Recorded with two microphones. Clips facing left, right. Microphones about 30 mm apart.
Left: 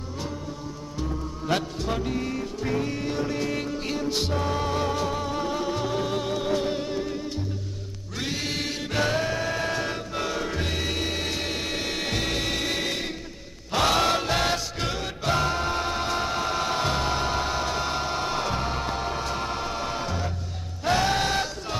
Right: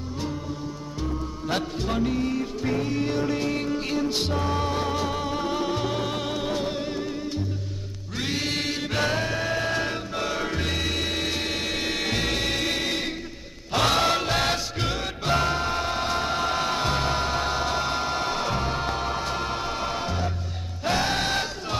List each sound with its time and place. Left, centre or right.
1.6 s music: centre